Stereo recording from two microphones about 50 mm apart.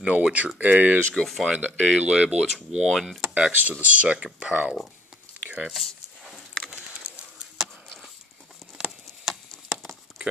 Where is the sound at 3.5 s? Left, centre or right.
Right; by 4.5 s centre.